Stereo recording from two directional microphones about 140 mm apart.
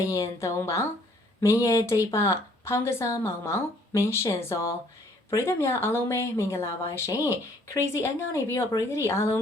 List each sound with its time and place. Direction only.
0.1 s speech: 20° left (ahead or behind)